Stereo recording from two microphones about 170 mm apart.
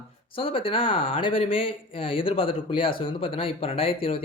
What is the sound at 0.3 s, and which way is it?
Speech, 30° left (ahead or behind).